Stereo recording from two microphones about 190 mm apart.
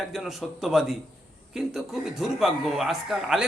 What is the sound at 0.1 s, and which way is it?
Speech, centre (ahead or behind).